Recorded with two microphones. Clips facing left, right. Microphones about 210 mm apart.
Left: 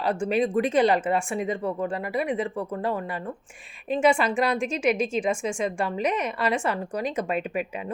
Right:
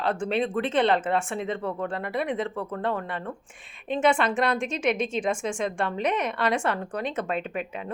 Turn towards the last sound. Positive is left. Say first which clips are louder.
# left 2 dB
turn(degrees=10)  # may be behind; listen again after turning